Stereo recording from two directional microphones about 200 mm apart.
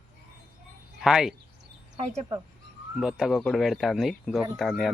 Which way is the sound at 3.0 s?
Centre (ahead or behind).